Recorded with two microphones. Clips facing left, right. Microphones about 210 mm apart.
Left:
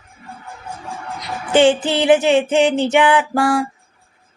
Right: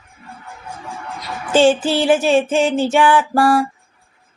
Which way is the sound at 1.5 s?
20° left (ahead or behind).